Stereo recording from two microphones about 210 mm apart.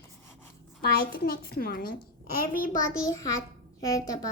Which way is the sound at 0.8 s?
45° left (ahead or behind).